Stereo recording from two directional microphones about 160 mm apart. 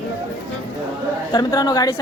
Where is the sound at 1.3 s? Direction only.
25° left (ahead or behind).